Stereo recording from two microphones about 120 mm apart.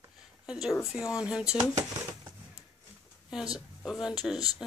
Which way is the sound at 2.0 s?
30° right (ahead or behind).